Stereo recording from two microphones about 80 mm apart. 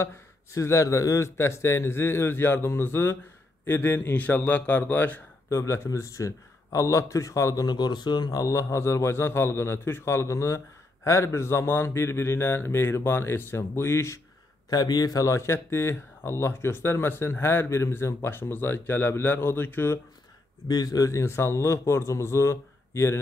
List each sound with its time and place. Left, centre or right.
0.0 s a man's voice: left
5.5 s speech: left
7.6 s speech: left
14.7 s speech: left
20.6 s speech: left